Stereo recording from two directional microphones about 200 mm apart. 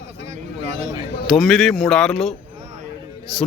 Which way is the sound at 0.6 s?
35° right (ahead or behind).